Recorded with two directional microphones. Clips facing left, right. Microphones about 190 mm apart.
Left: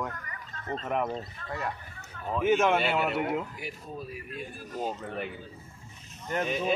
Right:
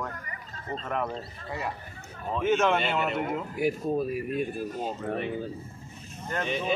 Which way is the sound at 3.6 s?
55° right (ahead or behind).